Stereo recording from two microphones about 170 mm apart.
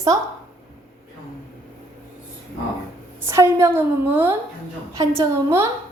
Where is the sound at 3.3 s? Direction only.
15° right (ahead or behind).